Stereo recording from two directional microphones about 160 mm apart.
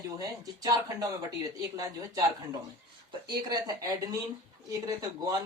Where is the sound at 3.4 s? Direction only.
25° right (ahead or behind).